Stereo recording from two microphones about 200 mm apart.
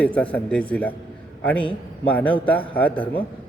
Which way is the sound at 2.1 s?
5° left (ahead or behind).